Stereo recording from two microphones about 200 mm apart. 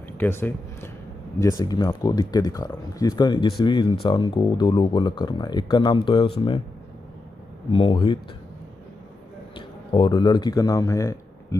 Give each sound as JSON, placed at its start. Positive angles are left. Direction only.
{"t": 0.2, "sound": "speech", "side_deg": 10}
{"t": 7.7, "sound": "speech", "side_deg": 25}
{"t": 9.6, "sound": "speech", "side_deg": 20}